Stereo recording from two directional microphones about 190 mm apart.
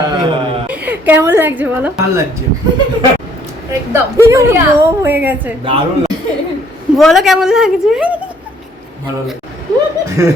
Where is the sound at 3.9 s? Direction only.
15° right (ahead or behind).